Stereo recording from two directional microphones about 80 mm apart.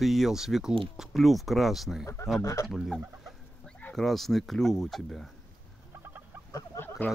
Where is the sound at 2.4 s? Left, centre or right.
Left.